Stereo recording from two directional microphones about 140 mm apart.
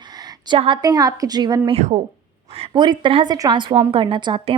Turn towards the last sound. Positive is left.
turn(degrees=-35)  # may be behind; listen again after turning